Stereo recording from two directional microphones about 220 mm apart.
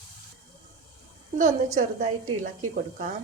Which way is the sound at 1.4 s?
35° right (ahead or behind).